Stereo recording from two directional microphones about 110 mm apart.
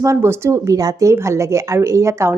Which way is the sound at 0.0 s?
25° right (ahead or behind).